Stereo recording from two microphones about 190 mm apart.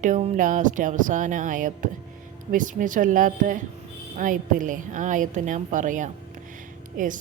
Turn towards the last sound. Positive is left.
turn(degrees=-45)  # may be behind; listen again after turning